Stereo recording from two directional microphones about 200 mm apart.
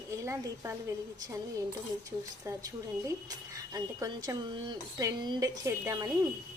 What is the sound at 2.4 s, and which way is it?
Speech, 15° right (ahead or behind).